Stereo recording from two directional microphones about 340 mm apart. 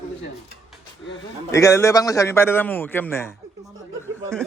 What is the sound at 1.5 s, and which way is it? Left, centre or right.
A man's voice, centre.